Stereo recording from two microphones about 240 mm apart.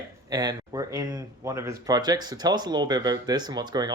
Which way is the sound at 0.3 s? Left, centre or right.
Centre.